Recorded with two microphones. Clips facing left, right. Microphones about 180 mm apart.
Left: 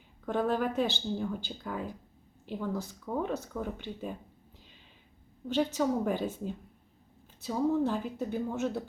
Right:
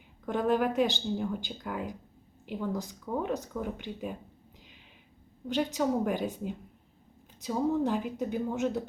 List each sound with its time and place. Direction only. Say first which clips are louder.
0.3 s speech: right 2 dB; 15° right (ahead or behind)
5.5 s speech: even; 15° right (ahead or behind)